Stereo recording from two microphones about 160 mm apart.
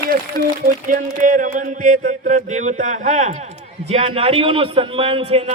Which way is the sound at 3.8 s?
40° right (ahead or behind).